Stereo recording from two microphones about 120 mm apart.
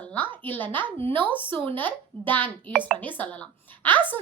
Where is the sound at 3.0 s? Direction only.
15° left (ahead or behind).